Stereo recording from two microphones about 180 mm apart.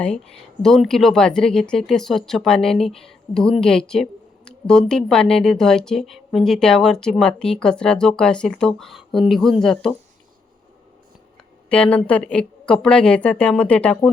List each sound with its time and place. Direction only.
0.6 s speech: centre (ahead or behind)
11.7 s speech: 5° left (ahead or behind)